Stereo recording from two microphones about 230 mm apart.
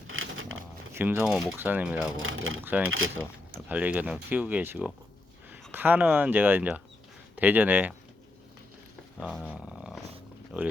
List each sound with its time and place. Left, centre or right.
0.1 s a sound: right
0.9 s speech: centre
2.1 s speech: right
2.6 s speech: centre
9.2 s speech: centre
9.5 s dog: centre
10.5 s speech: centre